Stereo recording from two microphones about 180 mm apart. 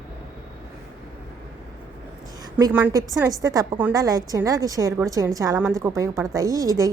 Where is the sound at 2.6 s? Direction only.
10° right (ahead or behind).